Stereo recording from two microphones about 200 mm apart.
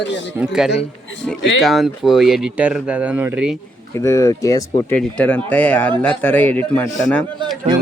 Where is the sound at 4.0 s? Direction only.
15° left (ahead or behind).